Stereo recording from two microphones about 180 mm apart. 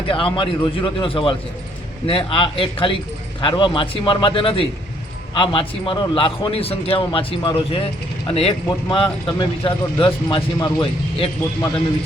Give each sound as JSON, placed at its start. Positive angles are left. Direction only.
{"t": 0.1, "sound": "a man's voice", "side_deg": 30}